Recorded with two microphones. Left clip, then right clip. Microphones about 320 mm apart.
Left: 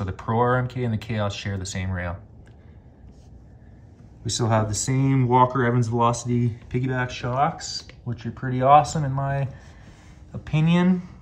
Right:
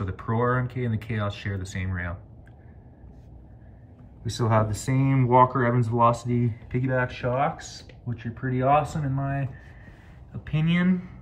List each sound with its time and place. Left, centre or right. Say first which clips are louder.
0.0 s speech: left 4 dB; centre
4.2 s speech: left 1 dB; centre
8.1 s speech: left 1 dB; centre
10.6 s speech: left 3 dB; centre